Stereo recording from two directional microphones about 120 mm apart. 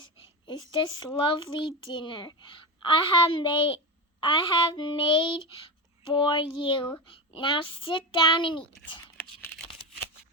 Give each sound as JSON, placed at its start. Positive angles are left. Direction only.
{"t": 0.4, "sound": "a woman's voice", "side_deg": 40}